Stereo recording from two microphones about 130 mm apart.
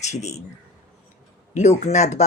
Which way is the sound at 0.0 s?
60° left (ahead or behind).